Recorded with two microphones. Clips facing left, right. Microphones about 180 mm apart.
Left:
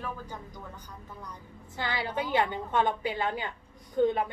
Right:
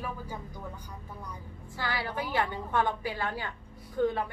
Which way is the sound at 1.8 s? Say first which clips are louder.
Left 2 dB; 20° left (ahead or behind).